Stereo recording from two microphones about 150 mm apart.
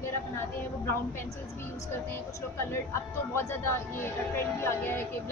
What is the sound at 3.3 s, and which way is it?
A woman's voice, 15° left (ahead or behind).